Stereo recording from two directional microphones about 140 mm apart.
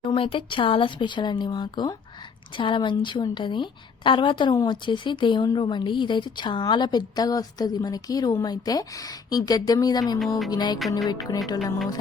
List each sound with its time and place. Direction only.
0.0 s a woman's voice: 35° left (ahead or behind)
10.2 s music: centre (ahead or behind)
10.5 s a woman's voice: 30° left (ahead or behind)